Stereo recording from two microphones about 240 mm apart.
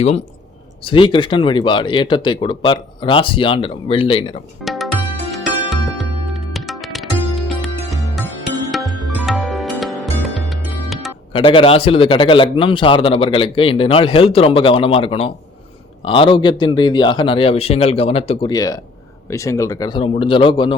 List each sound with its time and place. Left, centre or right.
0.9 s a man's voice: left
4.6 s music: centre
11.3 s a man's voice: left